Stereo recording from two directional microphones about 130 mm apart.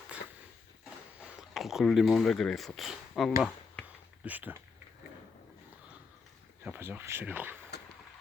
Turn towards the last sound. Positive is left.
turn(degrees=-15)  # may be behind; listen again after turning